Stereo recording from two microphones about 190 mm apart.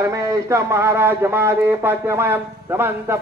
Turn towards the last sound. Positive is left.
turn(degrees=-10)  # may be behind; listen again after turning